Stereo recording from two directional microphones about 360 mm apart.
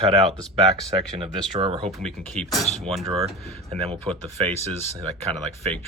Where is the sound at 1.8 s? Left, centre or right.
Centre.